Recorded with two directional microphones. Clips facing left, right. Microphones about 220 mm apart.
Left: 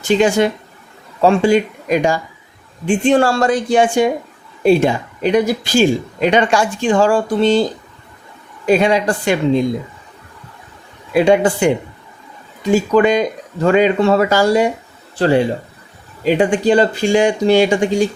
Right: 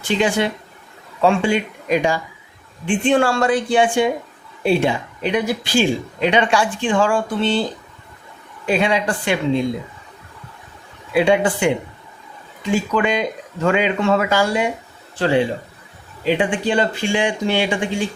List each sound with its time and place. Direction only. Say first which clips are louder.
0.2 s speech: left 5 dB; 45° left (ahead or behind)
8.6 s speech: left 5 dB; 40° left (ahead or behind)
11.1 s speech: left 4 dB; 40° left (ahead or behind)